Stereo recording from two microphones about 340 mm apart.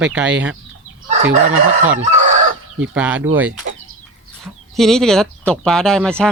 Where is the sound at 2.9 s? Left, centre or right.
Centre.